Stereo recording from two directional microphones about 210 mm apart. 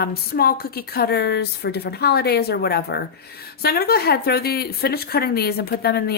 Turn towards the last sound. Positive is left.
turn(degrees=50)  # may be behind; listen again after turning